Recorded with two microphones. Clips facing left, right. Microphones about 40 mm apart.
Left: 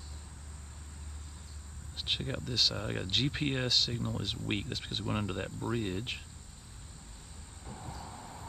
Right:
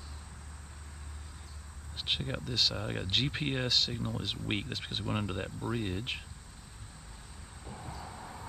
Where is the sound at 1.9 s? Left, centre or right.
Centre.